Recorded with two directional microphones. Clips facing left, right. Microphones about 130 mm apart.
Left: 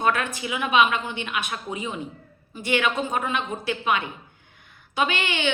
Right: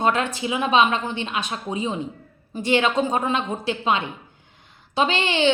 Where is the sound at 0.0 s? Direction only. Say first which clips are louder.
Right 3 dB; 25° right (ahead or behind).